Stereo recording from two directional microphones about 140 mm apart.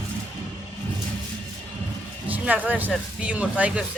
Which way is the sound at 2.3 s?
10° right (ahead or behind).